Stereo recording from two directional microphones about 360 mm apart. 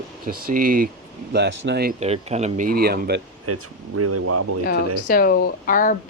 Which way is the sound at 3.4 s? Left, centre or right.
Right.